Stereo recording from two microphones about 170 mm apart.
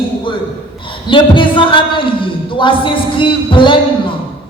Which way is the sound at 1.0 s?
30° left (ahead or behind).